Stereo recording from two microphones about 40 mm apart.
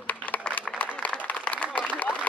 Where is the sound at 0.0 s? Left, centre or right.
Left.